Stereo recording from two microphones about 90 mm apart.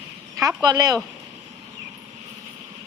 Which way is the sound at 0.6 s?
50° right (ahead or behind).